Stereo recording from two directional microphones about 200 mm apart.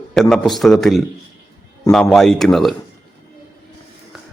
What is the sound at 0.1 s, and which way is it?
Speech, centre (ahead or behind).